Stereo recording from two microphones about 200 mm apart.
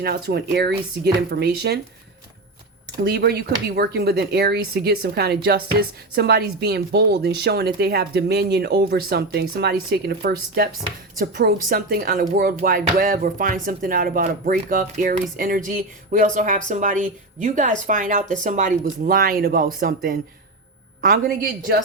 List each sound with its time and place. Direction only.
0.0 s speech: 50° right (ahead or behind)
3.0 s speech: 55° right (ahead or behind)